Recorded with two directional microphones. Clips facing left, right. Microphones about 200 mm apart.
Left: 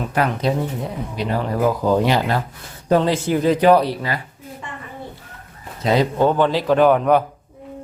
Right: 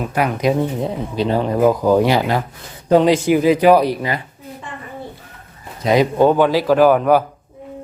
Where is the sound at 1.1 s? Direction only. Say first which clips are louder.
Right 5 dB; 30° right (ahead or behind).